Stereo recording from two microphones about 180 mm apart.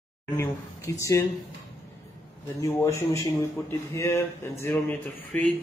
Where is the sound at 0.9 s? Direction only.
15° left (ahead or behind).